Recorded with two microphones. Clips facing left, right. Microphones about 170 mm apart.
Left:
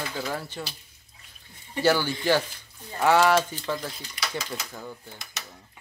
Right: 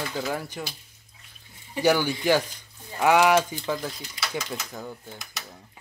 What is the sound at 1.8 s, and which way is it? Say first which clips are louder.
Speech: right 1 dB; 15° right (ahead or behind).